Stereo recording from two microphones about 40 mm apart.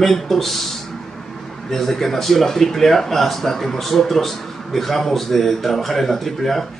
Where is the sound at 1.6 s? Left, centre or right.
Centre.